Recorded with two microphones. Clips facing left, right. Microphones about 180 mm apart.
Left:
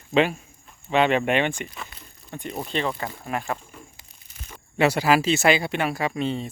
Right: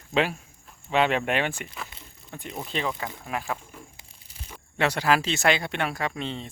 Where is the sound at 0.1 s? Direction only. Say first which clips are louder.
Left 4 dB; centre (ahead or behind).